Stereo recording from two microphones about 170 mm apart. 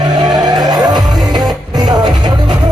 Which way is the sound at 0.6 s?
25° right (ahead or behind).